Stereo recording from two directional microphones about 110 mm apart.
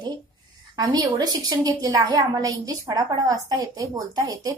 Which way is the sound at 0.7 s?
35° right (ahead or behind).